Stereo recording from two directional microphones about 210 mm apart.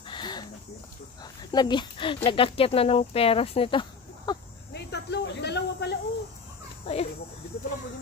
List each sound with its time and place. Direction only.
0.1 s a sound: 20° left (ahead or behind)
1.2 s speech: 20° left (ahead or behind)
4.7 s snake: 55° left (ahead or behind)
6.8 s speech: 25° left (ahead or behind)